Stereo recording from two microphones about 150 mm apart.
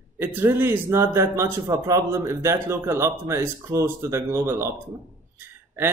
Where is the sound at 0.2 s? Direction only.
15° right (ahead or behind).